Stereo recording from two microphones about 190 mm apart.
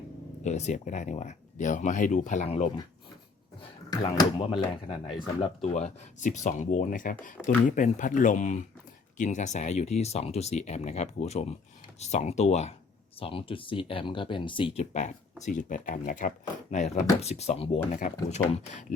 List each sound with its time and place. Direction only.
0.4 s speech: 35° left (ahead or behind)
3.8 s speech: 20° left (ahead or behind)
5.6 s speech: 35° left (ahead or behind)